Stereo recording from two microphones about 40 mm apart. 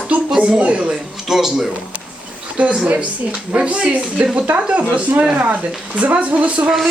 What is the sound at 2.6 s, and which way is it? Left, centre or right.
Speech, right.